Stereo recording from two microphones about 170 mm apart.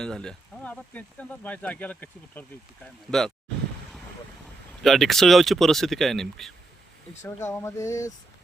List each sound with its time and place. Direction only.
0.0 s speech: 5° left (ahead or behind)
4.8 s speech: centre (ahead or behind)
7.2 s speech: 15° left (ahead or behind)